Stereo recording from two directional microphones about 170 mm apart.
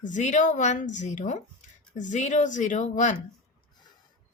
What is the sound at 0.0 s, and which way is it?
A woman's voice, 45° left (ahead or behind).